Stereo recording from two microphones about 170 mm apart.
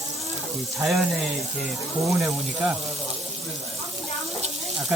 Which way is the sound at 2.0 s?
Centre (ahead or behind).